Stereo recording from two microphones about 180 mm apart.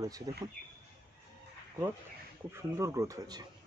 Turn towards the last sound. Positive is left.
turn(degrees=-20)  # may be behind; listen again after turning